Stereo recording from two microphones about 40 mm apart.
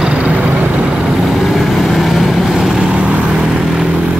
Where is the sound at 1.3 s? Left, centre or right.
Centre.